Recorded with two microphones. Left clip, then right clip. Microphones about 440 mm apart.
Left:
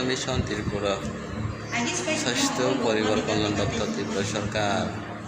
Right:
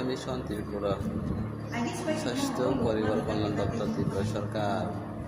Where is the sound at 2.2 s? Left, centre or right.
Right.